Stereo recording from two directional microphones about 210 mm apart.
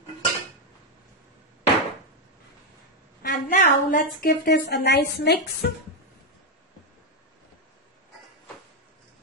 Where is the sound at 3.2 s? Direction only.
40° left (ahead or behind).